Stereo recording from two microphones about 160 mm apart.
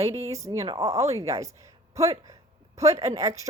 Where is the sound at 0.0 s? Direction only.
20° right (ahead or behind).